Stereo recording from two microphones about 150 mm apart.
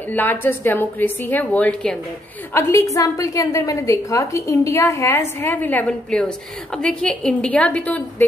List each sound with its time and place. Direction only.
0.1 s a woman's voice: 10° left (ahead or behind)
2.5 s a woman's voice: 20° left (ahead or behind)